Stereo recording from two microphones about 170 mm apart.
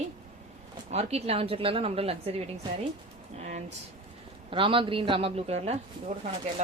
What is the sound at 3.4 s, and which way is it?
Speech, 40° right (ahead or behind).